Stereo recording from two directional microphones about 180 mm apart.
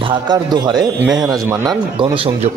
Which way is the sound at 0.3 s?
25° right (ahead or behind).